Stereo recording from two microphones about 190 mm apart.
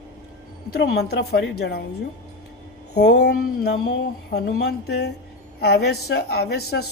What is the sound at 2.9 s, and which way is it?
A man's voice, 60° left (ahead or behind).